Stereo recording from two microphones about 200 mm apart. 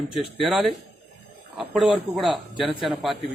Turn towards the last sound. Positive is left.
turn(degrees=0)  # may be behind; listen again after turning